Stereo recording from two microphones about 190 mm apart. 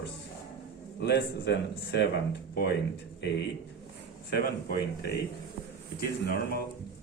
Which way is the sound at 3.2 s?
65° left (ahead or behind).